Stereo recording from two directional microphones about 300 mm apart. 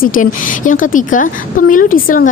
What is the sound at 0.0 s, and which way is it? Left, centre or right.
A woman's voice, left.